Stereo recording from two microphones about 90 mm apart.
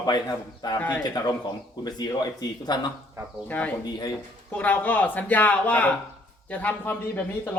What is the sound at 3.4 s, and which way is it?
Speech, 15° left (ahead or behind).